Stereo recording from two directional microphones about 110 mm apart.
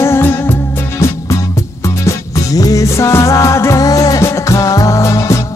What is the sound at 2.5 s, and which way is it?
Music, 30° left (ahead or behind).